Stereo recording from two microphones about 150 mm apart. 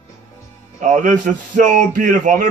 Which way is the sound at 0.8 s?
55° right (ahead or behind).